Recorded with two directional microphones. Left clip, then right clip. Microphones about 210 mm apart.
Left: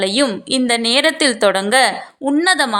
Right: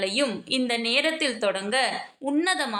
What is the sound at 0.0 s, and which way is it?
A woman's voice, 35° left (ahead or behind).